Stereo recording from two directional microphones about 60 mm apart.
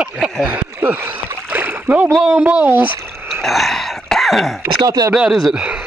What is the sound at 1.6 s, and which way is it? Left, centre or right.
Splash, right.